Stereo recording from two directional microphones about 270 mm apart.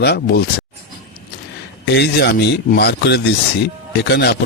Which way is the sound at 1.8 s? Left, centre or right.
Left.